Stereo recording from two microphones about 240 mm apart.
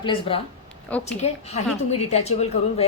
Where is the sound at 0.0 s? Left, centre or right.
Left.